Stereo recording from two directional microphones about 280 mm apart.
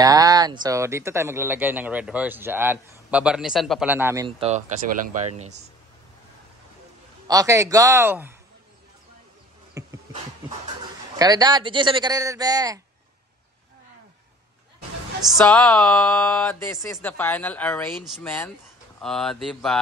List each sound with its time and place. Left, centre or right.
0.0 s speech: centre
4.4 s speech: right
7.2 s speech: centre
9.8 s insect: centre
11.1 s speech: centre
15.3 s speech: centre